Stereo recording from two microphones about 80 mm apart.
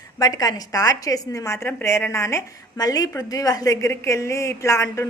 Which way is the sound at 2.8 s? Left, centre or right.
Left.